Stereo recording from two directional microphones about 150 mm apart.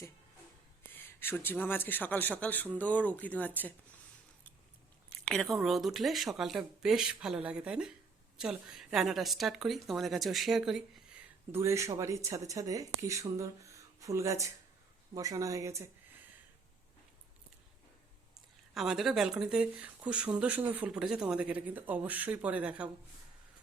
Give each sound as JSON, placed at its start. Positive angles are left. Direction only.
{"t": 0.9, "sound": "speech", "side_deg": 15}
{"t": 5.0, "sound": "speech", "side_deg": 5}
{"t": 11.5, "sound": "speech", "side_deg": -20}
{"t": 18.7, "sound": "speech", "side_deg": 0}